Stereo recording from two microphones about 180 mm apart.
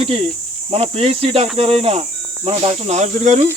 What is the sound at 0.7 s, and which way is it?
Speech, 35° right (ahead or behind).